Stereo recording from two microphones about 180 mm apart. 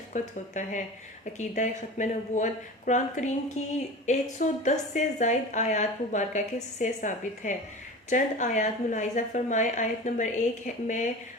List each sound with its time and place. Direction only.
0.1 s a woman's voice: 45° left (ahead or behind)